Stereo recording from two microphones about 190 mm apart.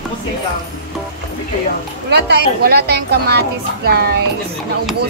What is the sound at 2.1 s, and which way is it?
A woman's voice, 65° right (ahead or behind).